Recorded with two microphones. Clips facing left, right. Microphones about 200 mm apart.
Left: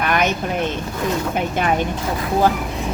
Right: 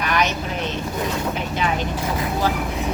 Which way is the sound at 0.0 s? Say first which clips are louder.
Left 2 dB; 50° left (ahead or behind).